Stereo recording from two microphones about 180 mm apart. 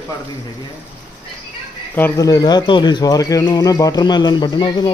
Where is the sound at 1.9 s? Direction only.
15° left (ahead or behind).